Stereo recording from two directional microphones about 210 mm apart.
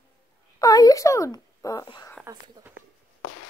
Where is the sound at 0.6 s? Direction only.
15° left (ahead or behind).